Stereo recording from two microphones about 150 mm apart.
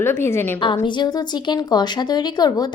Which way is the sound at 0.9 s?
30° left (ahead or behind).